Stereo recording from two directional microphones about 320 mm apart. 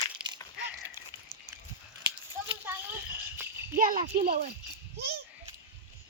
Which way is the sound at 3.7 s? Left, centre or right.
Right.